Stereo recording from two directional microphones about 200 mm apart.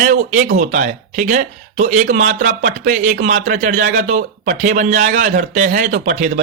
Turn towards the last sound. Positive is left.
turn(degrees=-40)  # may be behind; listen again after turning